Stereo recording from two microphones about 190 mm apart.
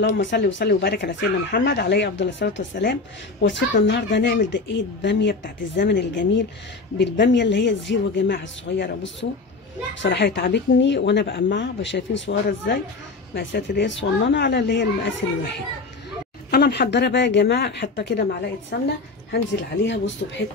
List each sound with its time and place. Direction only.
0.0 s speech: 70° left (ahead or behind)
2.8 s a woman's voice: 60° left (ahead or behind)
16.4 s a woman's voice: 60° left (ahead or behind)